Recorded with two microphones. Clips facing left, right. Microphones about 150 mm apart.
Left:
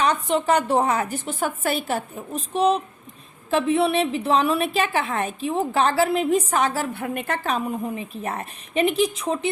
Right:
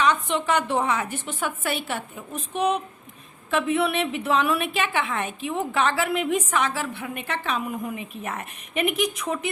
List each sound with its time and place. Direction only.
0.0 s a woman's voice: 35° left (ahead or behind)